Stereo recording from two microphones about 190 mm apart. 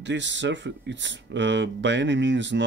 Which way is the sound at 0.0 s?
70° right (ahead or behind).